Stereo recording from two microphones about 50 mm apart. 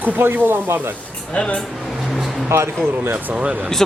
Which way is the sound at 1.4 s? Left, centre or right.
Centre.